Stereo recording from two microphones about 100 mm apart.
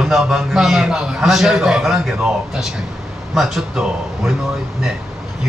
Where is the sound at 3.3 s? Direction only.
5° right (ahead or behind).